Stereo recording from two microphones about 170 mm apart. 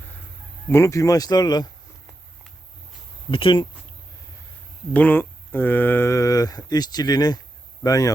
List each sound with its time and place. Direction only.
0.7 s speech: 15° left (ahead or behind)
3.3 s speech: 30° left (ahead or behind)
4.9 s speech: 10° left (ahead or behind)